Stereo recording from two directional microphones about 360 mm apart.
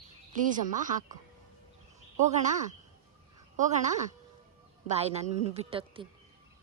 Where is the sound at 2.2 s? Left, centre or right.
Centre.